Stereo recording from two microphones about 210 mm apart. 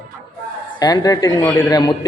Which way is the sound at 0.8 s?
20° left (ahead or behind).